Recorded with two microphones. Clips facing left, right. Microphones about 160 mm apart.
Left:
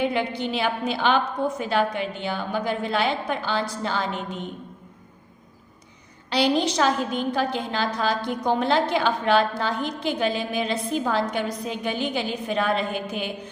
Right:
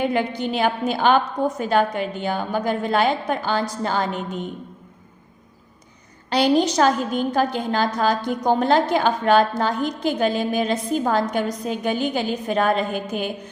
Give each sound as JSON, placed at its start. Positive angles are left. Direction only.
{"t": 0.0, "sound": "a woman's voice", "side_deg": -45}
{"t": 6.3, "sound": "a woman's voice", "side_deg": -45}